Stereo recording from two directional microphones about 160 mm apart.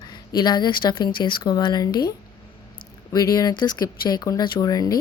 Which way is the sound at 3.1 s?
25° left (ahead or behind).